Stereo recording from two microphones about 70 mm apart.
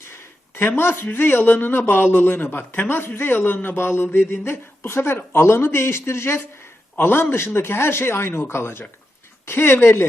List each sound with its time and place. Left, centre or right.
0.1 s a woman's voice: left